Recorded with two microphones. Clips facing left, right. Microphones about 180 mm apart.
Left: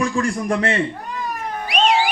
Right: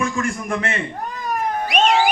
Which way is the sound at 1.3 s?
45° right (ahead or behind).